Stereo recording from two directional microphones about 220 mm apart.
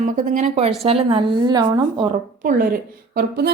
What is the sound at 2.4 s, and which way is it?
A woman's voice, 40° right (ahead or behind).